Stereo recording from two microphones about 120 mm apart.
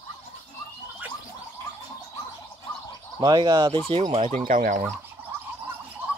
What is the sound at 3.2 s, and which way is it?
Speech, 35° right (ahead or behind).